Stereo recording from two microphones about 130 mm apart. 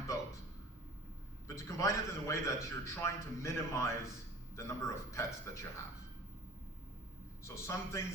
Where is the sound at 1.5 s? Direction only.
25° left (ahead or behind).